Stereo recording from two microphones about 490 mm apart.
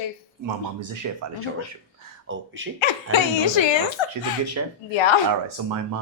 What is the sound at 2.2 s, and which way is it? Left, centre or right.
Speech, right.